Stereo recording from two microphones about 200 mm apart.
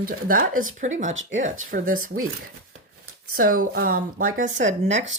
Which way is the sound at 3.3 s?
45° right (ahead or behind).